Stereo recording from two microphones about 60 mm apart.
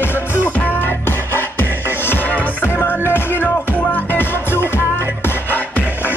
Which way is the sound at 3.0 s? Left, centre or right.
Left.